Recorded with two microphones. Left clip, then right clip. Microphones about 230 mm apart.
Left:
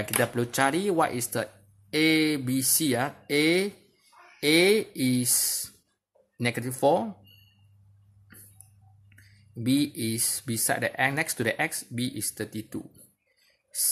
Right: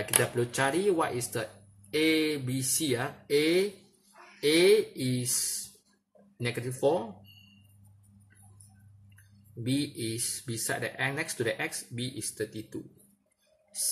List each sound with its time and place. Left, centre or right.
0.0 s speech: left
9.7 s speech: left